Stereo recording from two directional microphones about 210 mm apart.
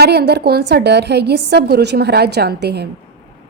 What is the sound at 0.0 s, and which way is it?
A woman's voice, 50° right (ahead or behind).